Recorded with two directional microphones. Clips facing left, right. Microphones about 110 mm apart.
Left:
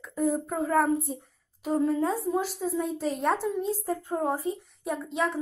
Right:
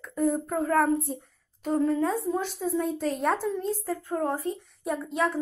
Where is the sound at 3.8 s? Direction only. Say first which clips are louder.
Even; 20° left (ahead or behind).